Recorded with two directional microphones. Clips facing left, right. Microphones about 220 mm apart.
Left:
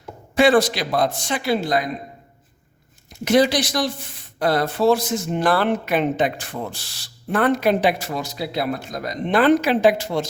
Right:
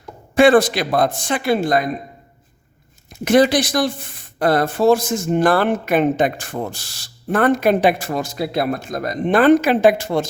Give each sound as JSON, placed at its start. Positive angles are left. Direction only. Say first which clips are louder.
{"t": 0.3, "sound": "speech", "louder": "right 4 dB", "side_deg": -50}
{"t": 3.2, "sound": "speech", "louder": "right 3 dB", "side_deg": -50}